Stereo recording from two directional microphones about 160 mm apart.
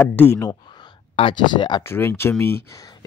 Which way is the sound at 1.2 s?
30° left (ahead or behind).